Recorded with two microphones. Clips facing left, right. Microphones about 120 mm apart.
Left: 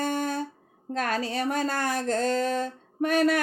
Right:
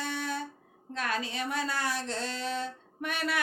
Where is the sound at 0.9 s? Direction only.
45° left (ahead or behind).